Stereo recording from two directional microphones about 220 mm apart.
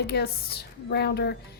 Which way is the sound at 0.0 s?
50° left (ahead or behind).